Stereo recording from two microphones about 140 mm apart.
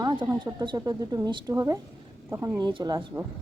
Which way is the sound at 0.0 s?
30° right (ahead or behind).